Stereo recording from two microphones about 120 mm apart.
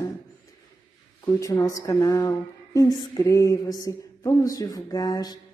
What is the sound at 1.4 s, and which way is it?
Mantra, 25° left (ahead or behind).